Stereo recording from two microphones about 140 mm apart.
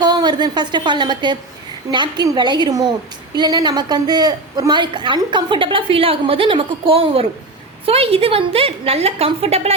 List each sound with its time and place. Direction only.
0.0 s a woman's voice: 30° right (ahead or behind)